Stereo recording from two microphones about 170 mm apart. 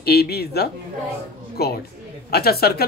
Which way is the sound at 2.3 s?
65° left (ahead or behind).